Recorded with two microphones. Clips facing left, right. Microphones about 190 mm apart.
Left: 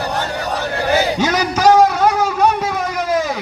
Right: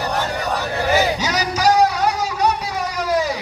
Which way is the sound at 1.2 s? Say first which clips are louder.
Left 4 dB; 55° left (ahead or behind).